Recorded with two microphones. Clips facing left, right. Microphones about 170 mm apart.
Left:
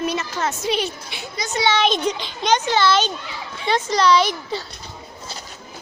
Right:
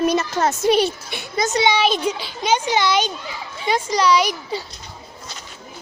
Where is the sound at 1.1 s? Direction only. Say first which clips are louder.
Right 7 dB; 50° right (ahead or behind).